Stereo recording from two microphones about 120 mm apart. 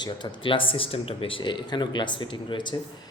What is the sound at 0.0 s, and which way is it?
Speech, 40° left (ahead or behind).